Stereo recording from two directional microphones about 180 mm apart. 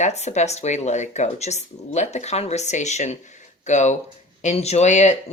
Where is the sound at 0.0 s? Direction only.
40° left (ahead or behind).